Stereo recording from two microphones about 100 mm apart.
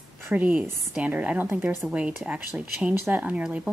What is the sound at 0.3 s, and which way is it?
Speech, 15° right (ahead or behind).